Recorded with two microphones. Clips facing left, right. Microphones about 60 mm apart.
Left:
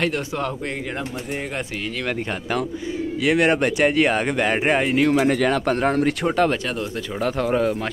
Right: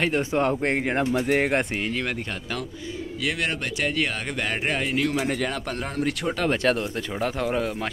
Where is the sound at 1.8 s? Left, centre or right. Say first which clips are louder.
Right 1 dB; right.